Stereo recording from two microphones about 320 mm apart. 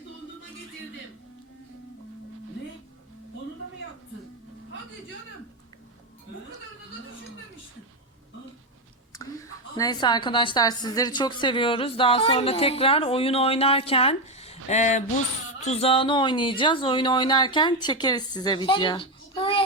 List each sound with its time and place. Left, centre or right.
9.1 s a woman's voice: centre